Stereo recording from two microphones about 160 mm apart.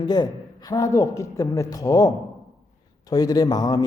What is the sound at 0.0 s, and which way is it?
Speech, 25° left (ahead or behind).